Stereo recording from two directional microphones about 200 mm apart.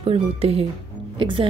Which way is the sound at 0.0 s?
30° right (ahead or behind).